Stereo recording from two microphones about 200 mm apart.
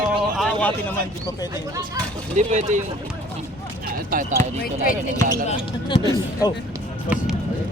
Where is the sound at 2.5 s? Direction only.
35° right (ahead or behind).